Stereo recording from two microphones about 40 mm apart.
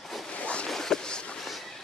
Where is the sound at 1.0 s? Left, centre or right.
Left.